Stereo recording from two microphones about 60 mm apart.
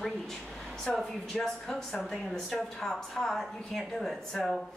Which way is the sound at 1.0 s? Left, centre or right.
Centre.